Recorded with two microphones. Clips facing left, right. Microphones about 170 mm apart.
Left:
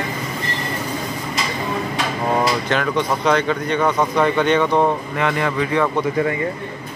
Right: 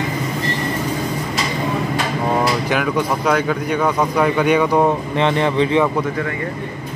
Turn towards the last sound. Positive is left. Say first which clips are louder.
# right 4 dB
turn(degrees=-25)  # may be behind; listen again after turning